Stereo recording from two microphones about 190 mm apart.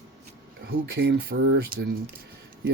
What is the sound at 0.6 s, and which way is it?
Speech, 55° right (ahead or behind).